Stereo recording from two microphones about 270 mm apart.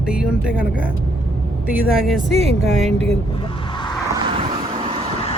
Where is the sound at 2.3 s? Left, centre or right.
Right.